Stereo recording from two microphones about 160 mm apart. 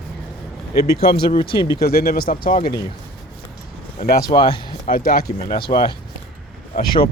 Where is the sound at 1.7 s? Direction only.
75° left (ahead or behind).